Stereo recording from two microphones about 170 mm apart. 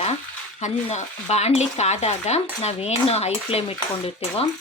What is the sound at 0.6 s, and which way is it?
Speech, 40° left (ahead or behind).